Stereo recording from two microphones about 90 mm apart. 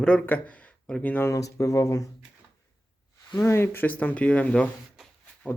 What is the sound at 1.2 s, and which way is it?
Speech, 40° left (ahead or behind).